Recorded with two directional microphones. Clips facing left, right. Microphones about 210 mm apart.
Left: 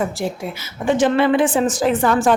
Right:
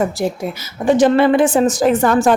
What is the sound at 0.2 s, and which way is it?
A woman's voice, 40° right (ahead or behind).